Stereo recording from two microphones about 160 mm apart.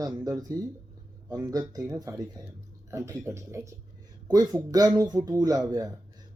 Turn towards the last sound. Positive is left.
turn(degrees=-25)  # may be behind; listen again after turning